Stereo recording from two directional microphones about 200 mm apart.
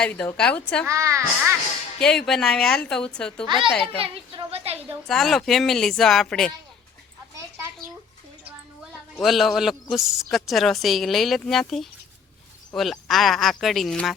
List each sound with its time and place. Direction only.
0.0 s a man's voice: 5° left (ahead or behind)
0.9 s speech: 15° right (ahead or behind)
2.0 s a man's voice: 5° left (ahead or behind)
3.4 s a child's voice: 25° right (ahead or behind)
5.0 s a man's voice: centre (ahead or behind)
9.1 s a man's voice: centre (ahead or behind)